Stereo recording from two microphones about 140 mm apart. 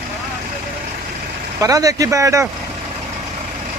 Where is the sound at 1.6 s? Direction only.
25° right (ahead or behind).